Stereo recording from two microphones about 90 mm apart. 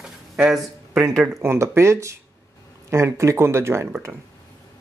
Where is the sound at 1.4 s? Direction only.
25° right (ahead or behind).